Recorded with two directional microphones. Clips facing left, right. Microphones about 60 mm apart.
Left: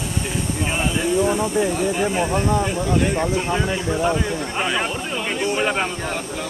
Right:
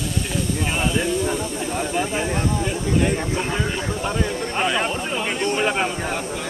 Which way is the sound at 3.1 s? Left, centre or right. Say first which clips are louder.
Left 3 dB; centre.